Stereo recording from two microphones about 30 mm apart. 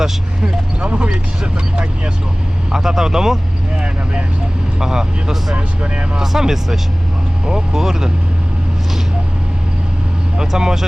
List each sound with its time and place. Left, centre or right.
0.9 s speech: right
2.7 s speech: centre
4.8 s speech: centre
5.5 s speech: right
6.1 s speech: centre
10.3 s speech: centre